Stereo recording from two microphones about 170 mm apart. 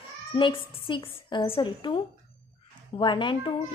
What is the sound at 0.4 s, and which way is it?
Speech, 30° left (ahead or behind).